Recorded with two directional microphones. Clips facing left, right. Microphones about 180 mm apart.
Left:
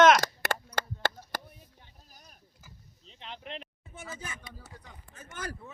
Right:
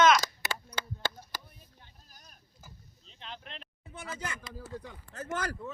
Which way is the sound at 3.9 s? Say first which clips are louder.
Right 3 dB; 75° right (ahead or behind).